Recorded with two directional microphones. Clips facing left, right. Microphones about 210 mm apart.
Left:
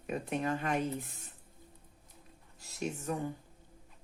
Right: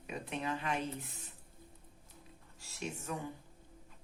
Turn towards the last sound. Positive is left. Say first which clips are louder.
# left 5 dB
turn(degrees=45)  # may be behind; listen again after turning